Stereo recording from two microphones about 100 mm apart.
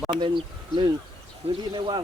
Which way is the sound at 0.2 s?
50° right (ahead or behind).